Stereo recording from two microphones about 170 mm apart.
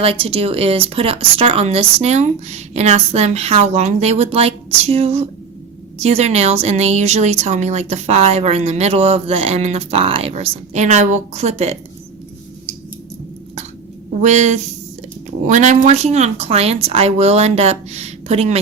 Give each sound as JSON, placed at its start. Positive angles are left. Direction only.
{"t": 0.0, "sound": "speech", "side_deg": -35}
{"t": 14.2, "sound": "speech", "side_deg": -45}